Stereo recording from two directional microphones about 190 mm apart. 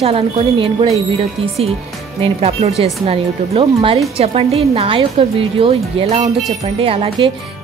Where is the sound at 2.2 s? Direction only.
30° right (ahead or behind).